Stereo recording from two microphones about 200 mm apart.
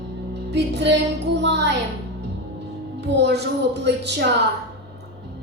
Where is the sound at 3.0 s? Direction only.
60° right (ahead or behind).